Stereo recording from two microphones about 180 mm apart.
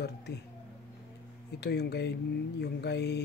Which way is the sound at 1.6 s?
65° left (ahead or behind).